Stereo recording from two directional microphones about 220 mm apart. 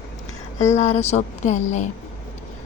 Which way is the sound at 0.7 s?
30° left (ahead or behind).